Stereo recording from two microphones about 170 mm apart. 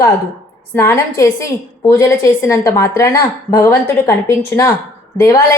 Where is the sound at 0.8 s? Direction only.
15° left (ahead or behind).